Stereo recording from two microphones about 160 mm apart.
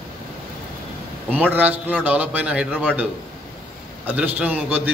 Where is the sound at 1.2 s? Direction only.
10° right (ahead or behind).